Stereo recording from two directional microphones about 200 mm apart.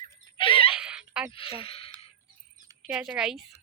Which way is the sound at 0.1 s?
25° left (ahead or behind).